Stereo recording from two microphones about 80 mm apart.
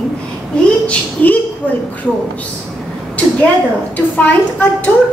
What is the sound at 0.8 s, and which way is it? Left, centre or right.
Speech, centre.